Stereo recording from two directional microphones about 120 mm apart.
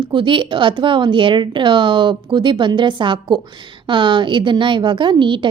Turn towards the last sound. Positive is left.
turn(degrees=-40)  # may be behind; listen again after turning